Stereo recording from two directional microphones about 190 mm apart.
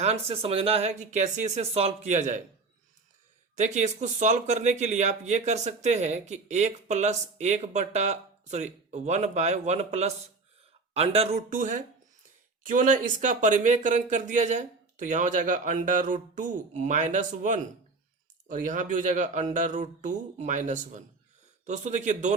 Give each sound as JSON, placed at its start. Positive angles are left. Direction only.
{"t": 0.0, "sound": "speech", "side_deg": -30}
{"t": 3.6, "sound": "speech", "side_deg": -40}